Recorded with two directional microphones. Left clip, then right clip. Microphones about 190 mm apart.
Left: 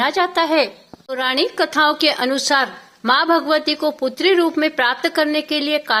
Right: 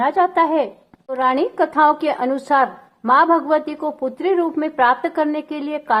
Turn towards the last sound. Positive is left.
turn(degrees=5)  # may be behind; listen again after turning